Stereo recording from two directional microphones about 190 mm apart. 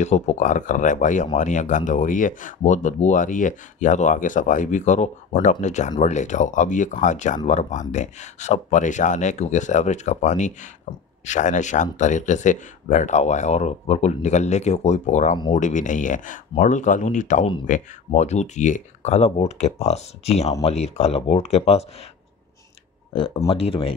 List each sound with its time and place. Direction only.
0.0 s speech: 35° left (ahead or behind)
23.1 s speech: 30° left (ahead or behind)